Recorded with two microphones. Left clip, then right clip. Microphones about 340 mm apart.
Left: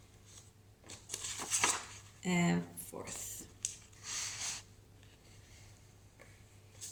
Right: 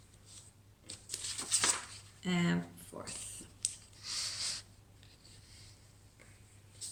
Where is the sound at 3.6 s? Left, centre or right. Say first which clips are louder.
Right 3 dB; centre.